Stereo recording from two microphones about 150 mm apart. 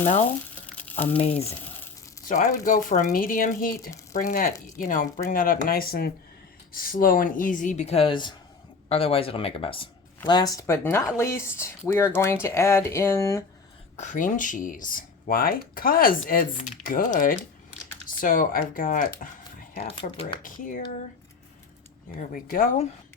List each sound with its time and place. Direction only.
0.0 s speech: 50° left (ahead or behind)
2.2 s speech: 60° left (ahead or behind); by 6.1 s 85° left
6.7 s speech: 70° left (ahead or behind); by 9.9 s 35° left (ahead or behind)
10.2 s speech: 25° left (ahead or behind)
13.9 s speech: 55° left (ahead or behind)
20.0 s speech: 35° left (ahead or behind)
20.4 s speech: 65° left (ahead or behind)
22.3 s speech: 70° left (ahead or behind)